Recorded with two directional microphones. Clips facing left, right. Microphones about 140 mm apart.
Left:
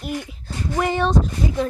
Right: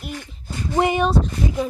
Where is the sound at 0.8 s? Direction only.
15° right (ahead or behind).